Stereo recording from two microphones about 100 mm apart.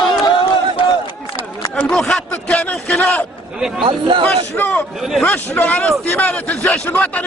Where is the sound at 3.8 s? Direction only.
55° right (ahead or behind).